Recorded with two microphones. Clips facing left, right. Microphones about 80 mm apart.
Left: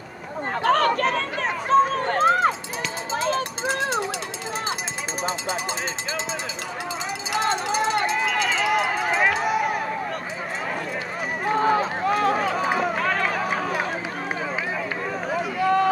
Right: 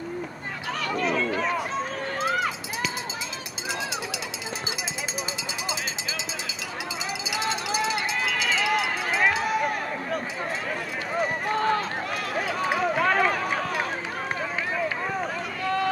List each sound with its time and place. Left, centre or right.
0.7 s run: left
3.2 s a sound: left
5.2 s a sound: left
7.3 s a sound: left
8.1 s run: centre
11.1 s run: centre
12.1 s run: left
12.5 s run: centre
15.3 s run: centre